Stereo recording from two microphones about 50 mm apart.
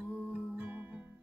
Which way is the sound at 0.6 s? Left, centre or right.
Right.